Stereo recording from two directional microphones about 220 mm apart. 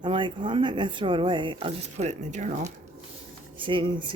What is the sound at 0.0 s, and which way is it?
Speech, 20° right (ahead or behind).